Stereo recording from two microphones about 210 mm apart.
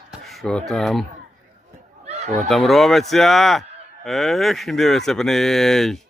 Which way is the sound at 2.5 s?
Centre (ahead or behind).